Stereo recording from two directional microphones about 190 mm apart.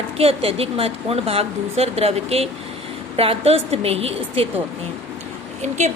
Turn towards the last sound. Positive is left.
turn(degrees=-40)  # may be behind; listen again after turning